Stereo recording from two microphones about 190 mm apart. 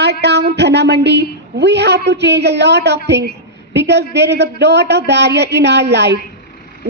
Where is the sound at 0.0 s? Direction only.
60° right (ahead or behind).